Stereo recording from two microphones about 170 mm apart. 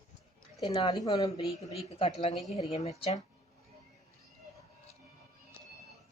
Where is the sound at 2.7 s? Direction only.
40° left (ahead or behind).